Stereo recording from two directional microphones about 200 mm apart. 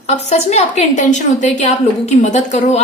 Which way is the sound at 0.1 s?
35° left (ahead or behind).